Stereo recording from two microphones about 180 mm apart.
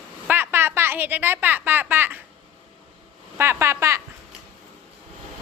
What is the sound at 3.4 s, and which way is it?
Speech, 15° right (ahead or behind).